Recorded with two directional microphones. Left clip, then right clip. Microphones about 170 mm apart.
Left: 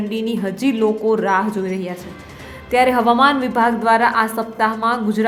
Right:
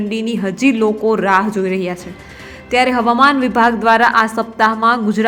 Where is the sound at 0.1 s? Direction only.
15° right (ahead or behind).